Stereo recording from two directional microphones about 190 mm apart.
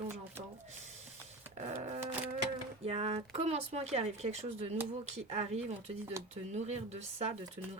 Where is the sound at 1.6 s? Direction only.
40° right (ahead or behind).